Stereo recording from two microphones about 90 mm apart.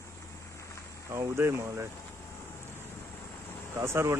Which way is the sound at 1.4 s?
30° right (ahead or behind).